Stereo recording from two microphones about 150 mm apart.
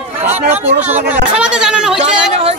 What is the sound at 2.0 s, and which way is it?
Speech, 45° right (ahead or behind).